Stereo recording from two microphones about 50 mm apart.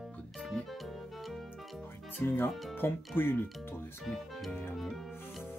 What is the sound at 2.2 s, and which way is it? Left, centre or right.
Speech, left.